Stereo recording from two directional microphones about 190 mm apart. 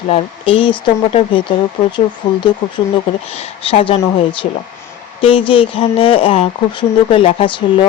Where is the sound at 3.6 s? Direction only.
30° left (ahead or behind).